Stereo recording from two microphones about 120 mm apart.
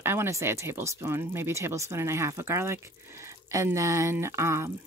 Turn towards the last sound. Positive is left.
turn(degrees=-20)  # may be behind; listen again after turning